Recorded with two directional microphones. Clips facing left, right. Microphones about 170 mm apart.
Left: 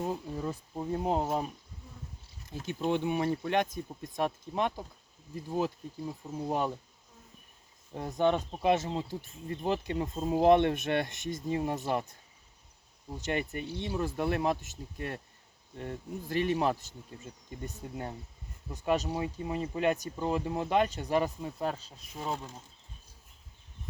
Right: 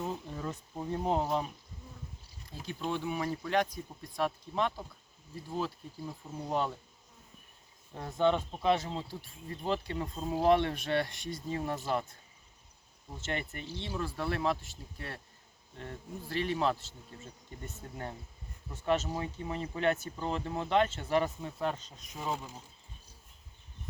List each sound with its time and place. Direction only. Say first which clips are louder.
0.0 s speech: left 3 dB; 10° left (ahead or behind)
2.5 s speech: left 5 dB; 15° left (ahead or behind)
7.9 s speech: left 1 dB; 20° left (ahead or behind)
13.1 s speech: left 5 dB; 15° left (ahead or behind)
17.8 s speech: left 1 dB; 15° left (ahead or behind)